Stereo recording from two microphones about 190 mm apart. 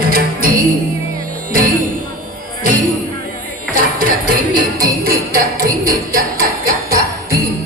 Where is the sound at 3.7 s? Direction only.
50° right (ahead or behind).